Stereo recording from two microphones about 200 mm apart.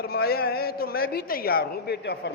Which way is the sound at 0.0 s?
50° left (ahead or behind).